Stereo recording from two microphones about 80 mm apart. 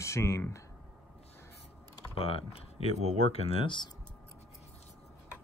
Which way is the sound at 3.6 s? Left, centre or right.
Left.